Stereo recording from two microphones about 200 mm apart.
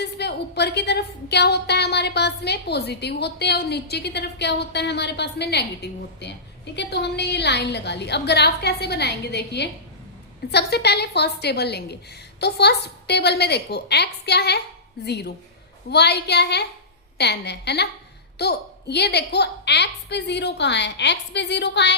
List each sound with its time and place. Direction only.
0.0 s a woman's voice: 55° left (ahead or behind)